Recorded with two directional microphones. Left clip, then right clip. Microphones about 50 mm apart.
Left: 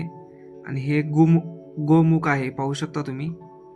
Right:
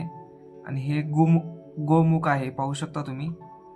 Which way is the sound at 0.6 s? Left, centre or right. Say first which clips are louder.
Left 6 dB; left.